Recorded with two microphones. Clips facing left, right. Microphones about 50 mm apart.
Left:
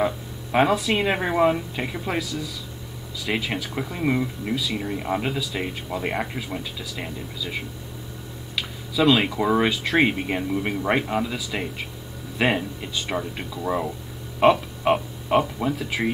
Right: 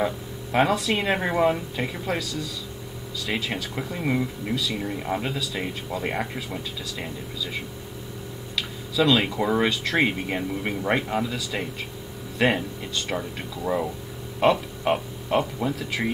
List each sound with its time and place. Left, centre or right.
0.0 s speech: centre
3.3 s speech: centre
8.5 s speech: centre